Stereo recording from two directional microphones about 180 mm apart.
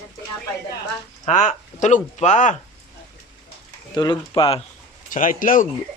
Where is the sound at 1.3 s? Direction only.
40° left (ahead or behind).